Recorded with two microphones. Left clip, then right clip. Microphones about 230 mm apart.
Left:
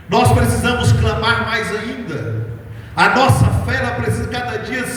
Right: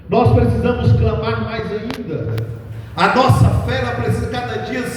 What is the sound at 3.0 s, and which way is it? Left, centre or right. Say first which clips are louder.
Speech: left 1 dB; left.